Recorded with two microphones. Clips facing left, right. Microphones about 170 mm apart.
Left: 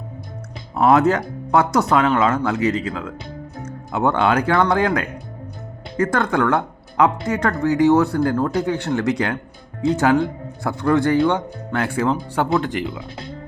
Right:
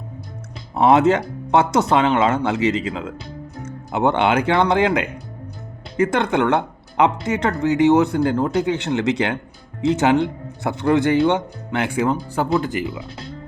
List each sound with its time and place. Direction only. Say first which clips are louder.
0.8 s speech: right 1 dB; 25° right (ahead or behind)
12.1 s speech: even; centre (ahead or behind)